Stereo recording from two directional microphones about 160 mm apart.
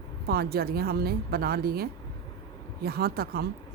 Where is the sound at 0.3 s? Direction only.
75° right (ahead or behind).